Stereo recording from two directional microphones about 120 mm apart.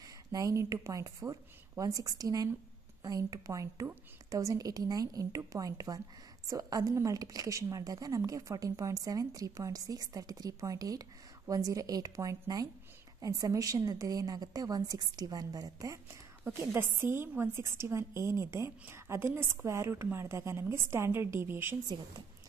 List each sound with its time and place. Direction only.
0.0 s a woman's voice: 30° right (ahead or behind)
16.4 s a woman's voice: 20° right (ahead or behind)